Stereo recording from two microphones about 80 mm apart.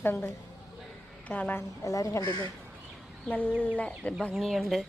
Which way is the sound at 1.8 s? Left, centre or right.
Left.